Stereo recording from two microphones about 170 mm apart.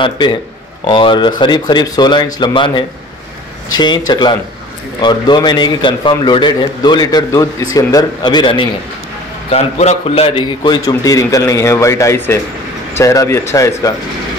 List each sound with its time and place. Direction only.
0.0 s a man's voice: 30° left (ahead or behind)
9.5 s a man's voice: 40° left (ahead or behind); by 13.9 s 15° left (ahead or behind)